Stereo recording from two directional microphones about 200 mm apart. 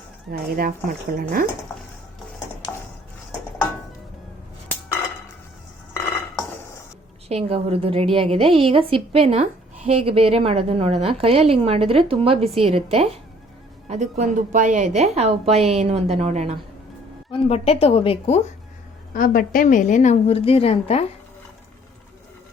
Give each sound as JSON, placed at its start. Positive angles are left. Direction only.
{"t": 0.3, "sound": "speech", "side_deg": -45}
{"t": 2.6, "sound": "a sound", "side_deg": 20}
{"t": 7.3, "sound": "a woman's voice", "side_deg": -30}
{"t": 17.3, "sound": "a woman's voice", "side_deg": 30}
{"t": 19.1, "sound": "a woman's voice", "side_deg": 45}